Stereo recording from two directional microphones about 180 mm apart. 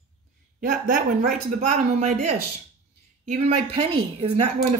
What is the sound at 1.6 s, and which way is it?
A woman's voice, 40° right (ahead or behind).